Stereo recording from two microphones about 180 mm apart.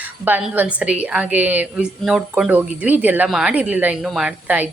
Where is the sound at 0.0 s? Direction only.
10° right (ahead or behind).